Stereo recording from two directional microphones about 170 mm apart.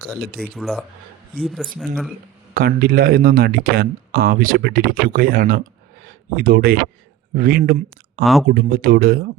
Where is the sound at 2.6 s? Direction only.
60° right (ahead or behind).